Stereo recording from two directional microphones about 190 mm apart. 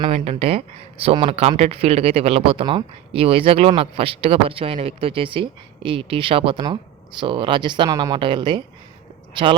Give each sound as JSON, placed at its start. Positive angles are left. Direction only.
{"t": 0.0, "sound": "speech", "side_deg": -35}